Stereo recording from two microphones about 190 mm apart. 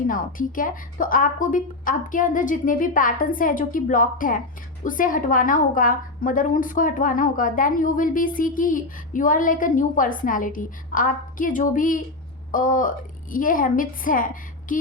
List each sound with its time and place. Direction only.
0.1 s a woman's voice: 45° left (ahead or behind)